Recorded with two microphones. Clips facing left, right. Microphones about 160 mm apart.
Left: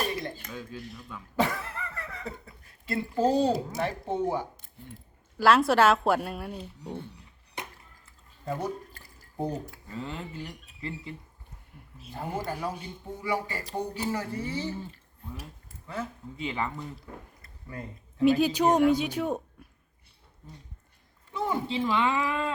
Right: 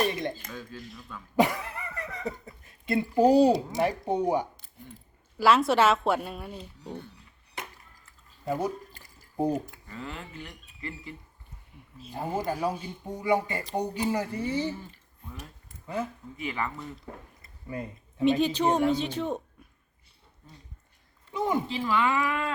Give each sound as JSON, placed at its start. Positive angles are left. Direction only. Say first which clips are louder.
{"t": 0.5, "sound": "speech", "louder": "left 1 dB", "side_deg": 10}
{"t": 1.4, "sound": "speech", "louder": "right 3 dB", "side_deg": -15}
{"t": 5.4, "sound": "a woman's voice", "louder": "left 1 dB", "side_deg": 0}
{"t": 8.4, "sound": "speech", "louder": "right 3 dB", "side_deg": -10}
{"t": 9.0, "sound": "drip", "louder": "right 4 dB", "side_deg": -15}
{"t": 9.9, "sound": "speech", "louder": "left 3 dB", "side_deg": 25}
{"t": 12.1, "sound": "speech", "louder": "right 3 dB", "side_deg": -15}
{"t": 16.4, "sound": "speech", "louder": "left 1 dB", "side_deg": 25}
{"t": 18.2, "sound": "speech", "louder": "left 1 dB", "side_deg": 5}
{"t": 21.3, "sound": "speech", "louder": "right 3 dB", "side_deg": -15}
{"t": 21.7, "sound": "speech", "louder": "even", "side_deg": 20}